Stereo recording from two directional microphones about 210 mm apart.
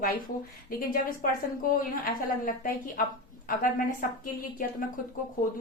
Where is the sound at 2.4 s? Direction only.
40° left (ahead or behind).